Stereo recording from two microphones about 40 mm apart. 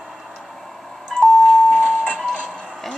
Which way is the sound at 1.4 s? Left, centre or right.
Centre.